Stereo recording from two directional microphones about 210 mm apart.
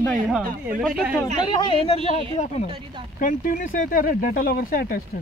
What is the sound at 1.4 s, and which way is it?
Speech, 20° left (ahead or behind).